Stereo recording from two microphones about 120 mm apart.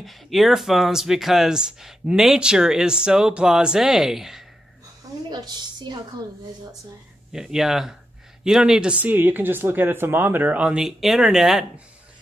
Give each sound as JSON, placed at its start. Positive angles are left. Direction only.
{"t": 0.0, "sound": "speech", "side_deg": 0}
{"t": 5.3, "sound": "a woman's voice", "side_deg": -35}
{"t": 7.3, "sound": "speech", "side_deg": -5}